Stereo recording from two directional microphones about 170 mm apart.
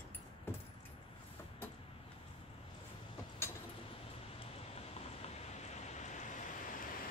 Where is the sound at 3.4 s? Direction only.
15° left (ahead or behind).